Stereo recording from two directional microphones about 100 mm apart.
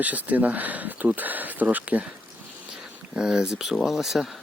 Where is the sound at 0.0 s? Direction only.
15° right (ahead or behind).